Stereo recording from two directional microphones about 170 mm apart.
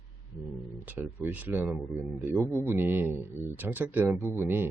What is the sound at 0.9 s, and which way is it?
Speech, 10° right (ahead or behind).